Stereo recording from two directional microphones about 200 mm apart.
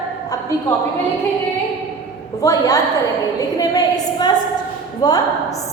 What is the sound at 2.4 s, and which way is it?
A woman's voice, 15° left (ahead or behind).